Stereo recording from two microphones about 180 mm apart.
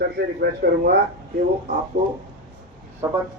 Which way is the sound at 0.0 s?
60° right (ahead or behind).